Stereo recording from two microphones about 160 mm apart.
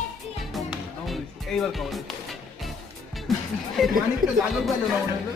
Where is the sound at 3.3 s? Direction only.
Centre (ahead or behind).